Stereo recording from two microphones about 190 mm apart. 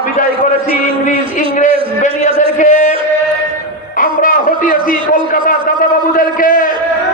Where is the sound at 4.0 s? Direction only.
45° left (ahead or behind).